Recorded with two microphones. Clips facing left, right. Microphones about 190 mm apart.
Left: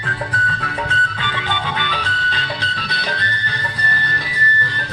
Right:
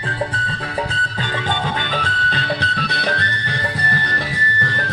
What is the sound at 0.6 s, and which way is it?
Music, 35° right (ahead or behind).